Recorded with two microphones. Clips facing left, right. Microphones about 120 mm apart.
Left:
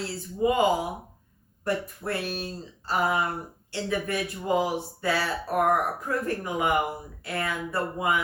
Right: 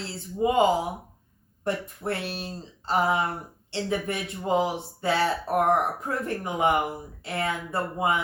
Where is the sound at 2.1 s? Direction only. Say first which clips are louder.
Right 1 dB; 25° right (ahead or behind).